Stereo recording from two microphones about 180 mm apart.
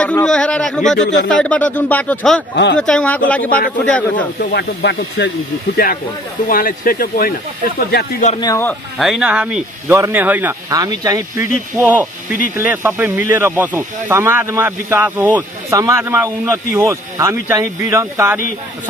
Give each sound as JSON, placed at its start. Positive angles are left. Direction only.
{"t": 0.0, "sound": "a man's voice", "side_deg": 5}
{"t": 2.5, "sound": "speech", "side_deg": 75}
{"t": 2.8, "sound": "speech", "side_deg": 5}
{"t": 4.4, "sound": "speech", "side_deg": 70}
{"t": 6.4, "sound": "speech", "side_deg": 50}
{"t": 8.4, "sound": "speech", "side_deg": 15}
{"t": 8.9, "sound": "speech", "side_deg": 0}
{"t": 10.8, "sound": "speech", "side_deg": -20}